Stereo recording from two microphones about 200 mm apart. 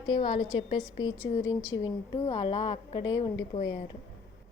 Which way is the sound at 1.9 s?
25° left (ahead or behind).